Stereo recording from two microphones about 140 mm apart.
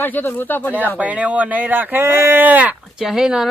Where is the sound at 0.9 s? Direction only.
10° right (ahead or behind).